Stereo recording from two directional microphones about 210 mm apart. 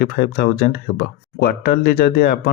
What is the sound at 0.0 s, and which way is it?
Speech, 50° left (ahead or behind).